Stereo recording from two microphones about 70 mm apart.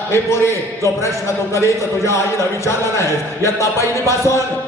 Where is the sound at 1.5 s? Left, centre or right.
Left.